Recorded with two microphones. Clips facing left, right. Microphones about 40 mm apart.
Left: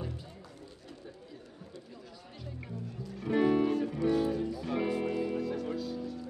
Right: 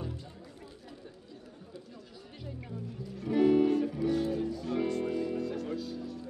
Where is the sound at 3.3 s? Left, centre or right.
Centre.